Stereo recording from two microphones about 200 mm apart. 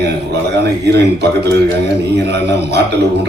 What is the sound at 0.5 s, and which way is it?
A man's voice, 60° right (ahead or behind).